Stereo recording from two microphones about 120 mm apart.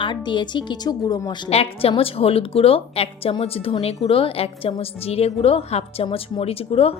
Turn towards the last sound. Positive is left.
turn(degrees=55)  # may be behind; listen again after turning